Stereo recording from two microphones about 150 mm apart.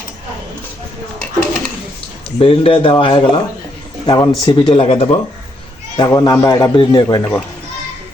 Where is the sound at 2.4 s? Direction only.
35° left (ahead or behind).